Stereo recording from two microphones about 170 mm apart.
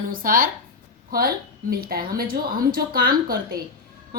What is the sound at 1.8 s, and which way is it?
Speech, 60° right (ahead or behind).